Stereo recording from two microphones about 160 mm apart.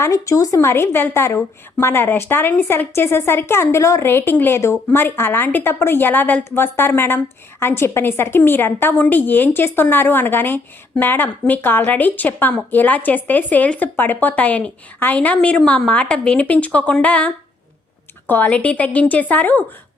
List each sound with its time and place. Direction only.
0.0 s a woman's voice: 20° left (ahead or behind)